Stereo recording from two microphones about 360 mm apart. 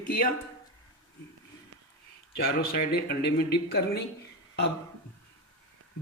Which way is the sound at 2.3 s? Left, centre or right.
Left.